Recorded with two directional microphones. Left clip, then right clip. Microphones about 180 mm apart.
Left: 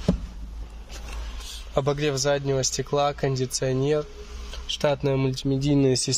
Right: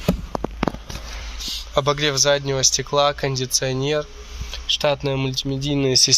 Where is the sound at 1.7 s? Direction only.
25° left (ahead or behind).